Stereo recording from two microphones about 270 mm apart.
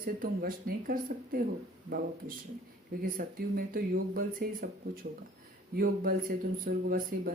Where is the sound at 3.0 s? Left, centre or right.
Right.